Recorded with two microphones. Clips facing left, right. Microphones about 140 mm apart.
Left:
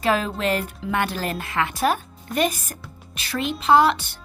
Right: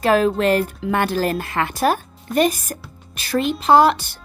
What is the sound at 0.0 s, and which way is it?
A woman's voice, 50° right (ahead or behind).